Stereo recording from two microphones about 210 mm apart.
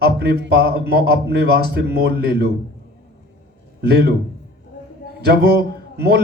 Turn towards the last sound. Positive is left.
turn(degrees=-50)  # may be behind; listen again after turning